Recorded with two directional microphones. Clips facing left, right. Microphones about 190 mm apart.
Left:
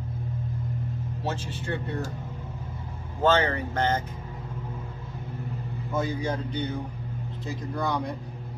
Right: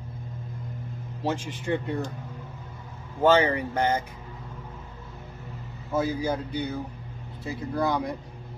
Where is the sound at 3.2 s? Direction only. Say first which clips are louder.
Right 3 dB; 10° right (ahead or behind).